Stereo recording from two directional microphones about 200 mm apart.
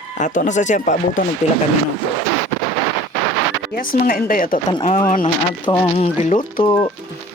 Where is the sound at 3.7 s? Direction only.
45° left (ahead or behind).